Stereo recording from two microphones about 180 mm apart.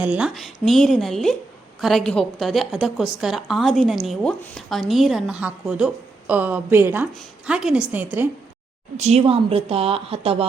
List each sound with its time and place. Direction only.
0.0 s a woman's voice: 5° right (ahead or behind)
9.0 s a woman's voice: 35° right (ahead or behind)